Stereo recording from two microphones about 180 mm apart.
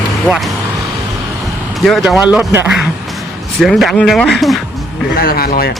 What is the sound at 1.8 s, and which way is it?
A man's voice, centre (ahead or behind).